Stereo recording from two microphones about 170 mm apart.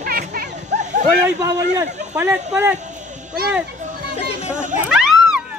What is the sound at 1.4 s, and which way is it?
Speech, 20° right (ahead or behind).